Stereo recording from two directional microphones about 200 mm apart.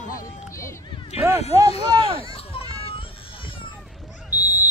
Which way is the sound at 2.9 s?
25° left (ahead or behind).